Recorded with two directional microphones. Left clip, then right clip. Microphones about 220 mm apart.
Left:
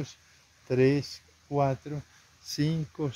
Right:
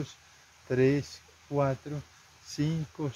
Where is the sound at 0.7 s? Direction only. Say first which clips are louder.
Left 1 dB; 35° left (ahead or behind).